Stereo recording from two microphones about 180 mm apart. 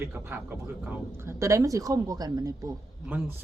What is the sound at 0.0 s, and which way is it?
Speech, 10° right (ahead or behind).